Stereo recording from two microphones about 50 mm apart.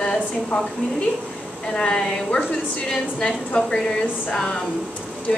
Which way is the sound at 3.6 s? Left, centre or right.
Centre.